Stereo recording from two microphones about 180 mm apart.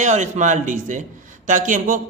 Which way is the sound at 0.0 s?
40° right (ahead or behind).